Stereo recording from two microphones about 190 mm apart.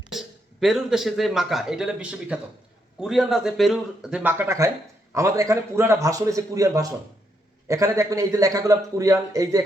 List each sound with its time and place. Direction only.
0.1 s a man's voice: centre (ahead or behind); by 9.6 s 15° right (ahead or behind)